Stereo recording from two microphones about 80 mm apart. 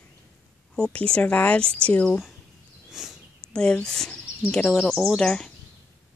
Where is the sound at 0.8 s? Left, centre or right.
Centre.